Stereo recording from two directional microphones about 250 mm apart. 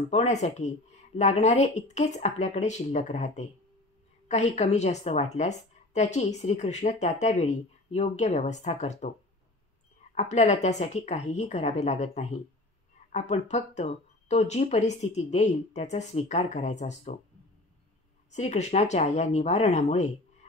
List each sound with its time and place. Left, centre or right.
0.1 s a woman's voice: left
10.1 s a woman's voice: left
18.3 s a woman's voice: left